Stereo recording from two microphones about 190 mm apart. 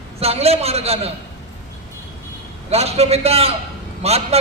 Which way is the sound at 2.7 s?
35° right (ahead or behind).